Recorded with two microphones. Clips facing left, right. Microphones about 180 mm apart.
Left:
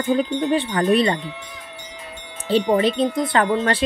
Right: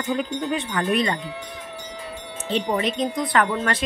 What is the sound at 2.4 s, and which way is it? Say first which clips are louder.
Wind chime: left 6 dB; 35° left (ahead or behind).